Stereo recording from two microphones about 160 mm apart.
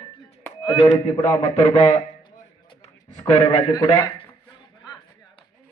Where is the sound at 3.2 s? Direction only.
25° left (ahead or behind).